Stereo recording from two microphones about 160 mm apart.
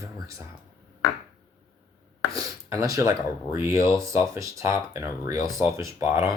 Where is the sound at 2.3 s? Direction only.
20° right (ahead or behind).